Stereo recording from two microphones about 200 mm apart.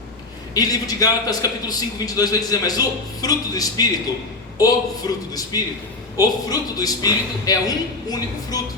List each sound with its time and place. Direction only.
0.5 s a man's voice: 20° left (ahead or behind)